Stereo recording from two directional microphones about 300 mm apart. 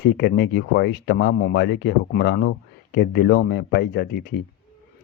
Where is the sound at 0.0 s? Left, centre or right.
Left.